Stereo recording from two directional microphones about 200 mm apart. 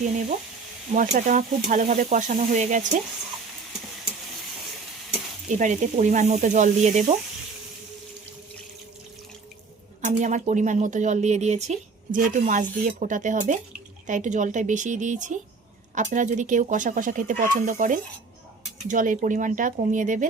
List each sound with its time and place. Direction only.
0.9 s speech: 35° right (ahead or behind)
5.5 s speech: 40° right (ahead or behind)
10.0 s speech: 35° right (ahead or behind)